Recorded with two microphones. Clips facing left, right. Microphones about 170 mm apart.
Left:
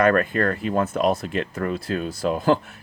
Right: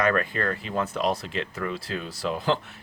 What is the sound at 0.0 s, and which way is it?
Speech, 50° left (ahead or behind).